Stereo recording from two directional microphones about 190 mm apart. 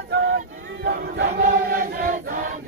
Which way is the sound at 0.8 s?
55° right (ahead or behind).